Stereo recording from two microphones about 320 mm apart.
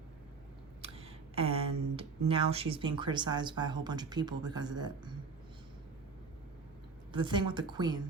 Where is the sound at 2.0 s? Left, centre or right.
Centre.